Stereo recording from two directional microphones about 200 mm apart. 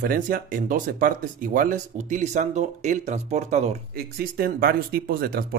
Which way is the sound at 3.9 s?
50° right (ahead or behind).